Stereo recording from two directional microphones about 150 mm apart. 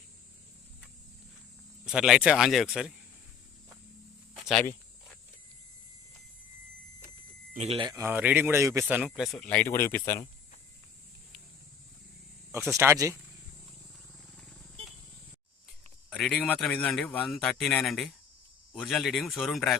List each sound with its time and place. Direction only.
1.8 s speech: 5° right (ahead or behind)
7.5 s speech: 45° right (ahead or behind)
7.8 s speech: 30° right (ahead or behind)
8.0 s speech: 10° right (ahead or behind)
9.0 s speech: centre (ahead or behind); by 10.2 s 15° left (ahead or behind)
12.5 s speech: 15° right (ahead or behind)
16.0 s speech: 5° left (ahead or behind)